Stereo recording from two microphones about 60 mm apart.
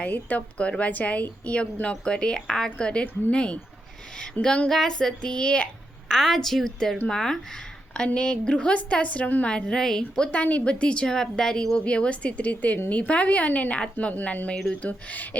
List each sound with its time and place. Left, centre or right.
0.0 s a woman's voice: left
6.1 s a woman's voice: centre
10.0 s a woman's voice: left